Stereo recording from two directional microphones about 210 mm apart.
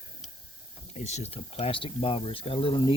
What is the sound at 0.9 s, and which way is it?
Speech, 30° left (ahead or behind).